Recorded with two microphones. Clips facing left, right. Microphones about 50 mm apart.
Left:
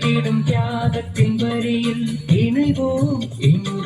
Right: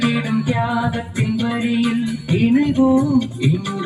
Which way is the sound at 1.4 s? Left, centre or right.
Centre.